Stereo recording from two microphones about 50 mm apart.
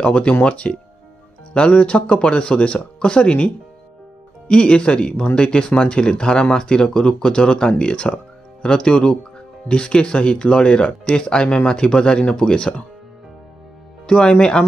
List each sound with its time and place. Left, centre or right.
0.0 s speech: left
14.0 s speech: centre